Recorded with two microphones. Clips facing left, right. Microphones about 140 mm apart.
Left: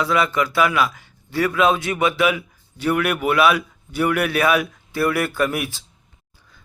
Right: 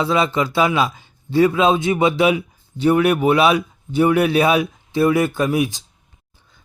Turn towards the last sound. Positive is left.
turn(degrees=-15)  # may be behind; listen again after turning